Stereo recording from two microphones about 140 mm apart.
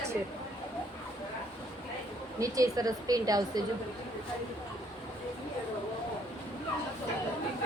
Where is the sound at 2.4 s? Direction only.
25° right (ahead or behind).